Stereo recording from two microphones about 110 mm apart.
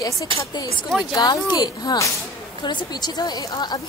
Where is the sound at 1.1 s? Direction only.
40° left (ahead or behind).